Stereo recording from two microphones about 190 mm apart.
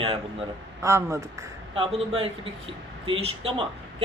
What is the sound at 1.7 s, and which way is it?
A woman's voice, 30° right (ahead or behind).